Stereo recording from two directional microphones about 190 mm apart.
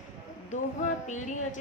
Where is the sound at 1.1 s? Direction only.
40° left (ahead or behind).